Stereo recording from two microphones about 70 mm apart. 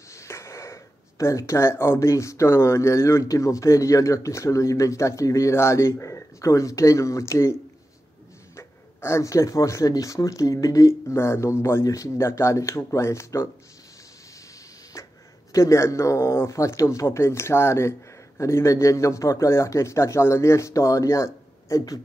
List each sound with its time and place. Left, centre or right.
0.1 s speech: left
8.5 s speech: left
14.9 s a sound: left
15.5 s speech: left